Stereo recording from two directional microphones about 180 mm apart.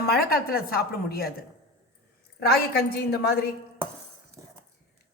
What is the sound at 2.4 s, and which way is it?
A woman's voice, 60° left (ahead or behind).